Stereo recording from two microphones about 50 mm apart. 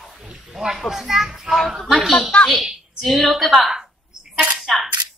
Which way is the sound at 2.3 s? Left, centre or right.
Centre.